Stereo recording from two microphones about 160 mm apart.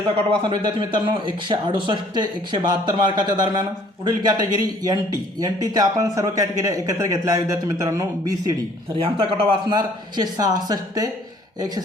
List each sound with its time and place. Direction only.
0.3 s speech: 30° right (ahead or behind)